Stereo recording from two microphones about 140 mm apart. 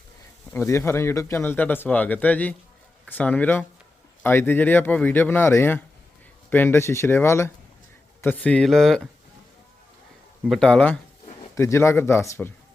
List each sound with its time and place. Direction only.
0.5 s speech: 15° left (ahead or behind)
10.5 s speech: 5° left (ahead or behind)
11.5 s speech: 20° left (ahead or behind)